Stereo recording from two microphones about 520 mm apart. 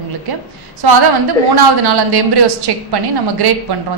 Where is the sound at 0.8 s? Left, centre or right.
Right.